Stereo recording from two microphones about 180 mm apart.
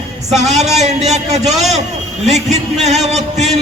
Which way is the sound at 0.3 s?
40° right (ahead or behind).